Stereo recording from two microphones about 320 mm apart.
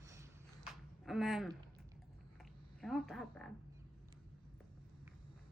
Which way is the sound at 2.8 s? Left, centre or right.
Centre.